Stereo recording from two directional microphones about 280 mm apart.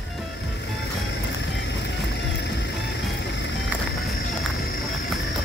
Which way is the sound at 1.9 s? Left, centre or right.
Left.